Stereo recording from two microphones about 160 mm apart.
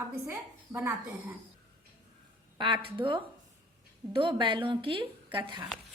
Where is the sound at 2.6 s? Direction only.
30° right (ahead or behind).